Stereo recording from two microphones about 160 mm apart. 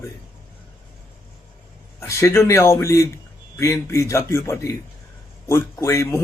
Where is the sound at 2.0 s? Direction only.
15° left (ahead or behind).